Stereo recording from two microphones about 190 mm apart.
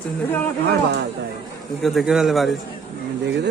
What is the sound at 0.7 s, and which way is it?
Speech, 60° right (ahead or behind).